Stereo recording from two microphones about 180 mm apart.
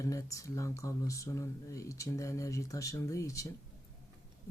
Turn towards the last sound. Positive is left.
turn(degrees=15)  # may be behind; listen again after turning